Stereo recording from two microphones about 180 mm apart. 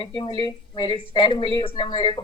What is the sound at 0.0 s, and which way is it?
A woman's voice, 25° left (ahead or behind).